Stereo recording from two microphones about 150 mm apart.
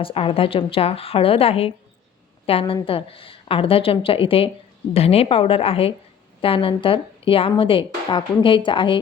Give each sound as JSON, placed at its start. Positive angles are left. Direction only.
{"t": 0.0, "sound": "speech", "side_deg": 35}